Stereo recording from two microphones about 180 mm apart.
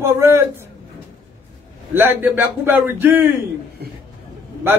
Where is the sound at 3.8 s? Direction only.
60° right (ahead or behind).